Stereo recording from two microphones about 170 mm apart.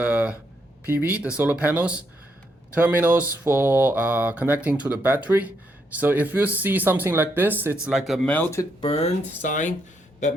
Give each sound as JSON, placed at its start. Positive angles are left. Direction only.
{"t": 0.0, "sound": "a sound", "side_deg": -10}
{"t": 0.9, "sound": "speech", "side_deg": -10}
{"t": 8.8, "sound": "speech", "side_deg": 35}